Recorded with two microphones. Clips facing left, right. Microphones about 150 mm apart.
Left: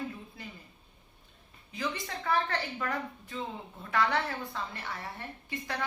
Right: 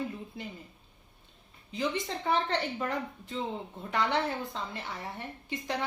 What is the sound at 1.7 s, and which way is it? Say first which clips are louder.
A woman's voice: right 4 dB; 25° right (ahead or behind).